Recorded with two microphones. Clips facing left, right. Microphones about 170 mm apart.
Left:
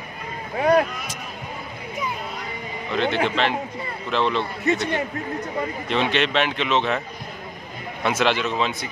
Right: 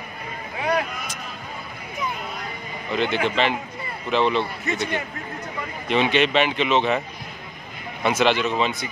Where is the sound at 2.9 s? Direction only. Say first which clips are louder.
Left 1 dB; centre (ahead or behind).